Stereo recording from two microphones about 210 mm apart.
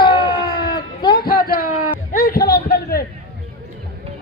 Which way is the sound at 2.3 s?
45° left (ahead or behind).